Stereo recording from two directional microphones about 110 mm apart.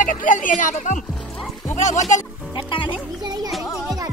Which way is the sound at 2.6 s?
50° left (ahead or behind).